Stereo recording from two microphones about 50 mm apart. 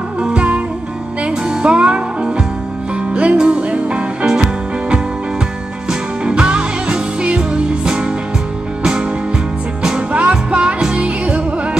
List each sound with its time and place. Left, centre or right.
0.2 s music: right
9.8 s music: right